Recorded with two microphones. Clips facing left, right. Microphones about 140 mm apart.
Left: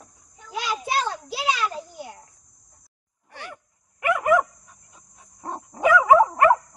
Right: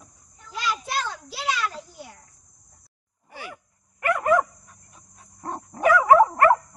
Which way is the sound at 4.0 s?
15° left (ahead or behind).